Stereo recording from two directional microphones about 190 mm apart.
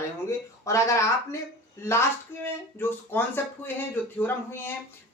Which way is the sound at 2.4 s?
10° left (ahead or behind).